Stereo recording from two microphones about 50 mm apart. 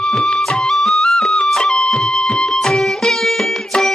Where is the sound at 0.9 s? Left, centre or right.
Centre.